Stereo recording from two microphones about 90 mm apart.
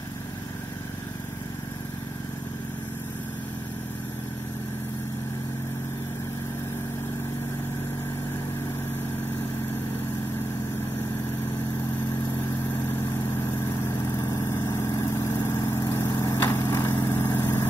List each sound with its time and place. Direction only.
12.4 s vehicle: 25° left (ahead or behind)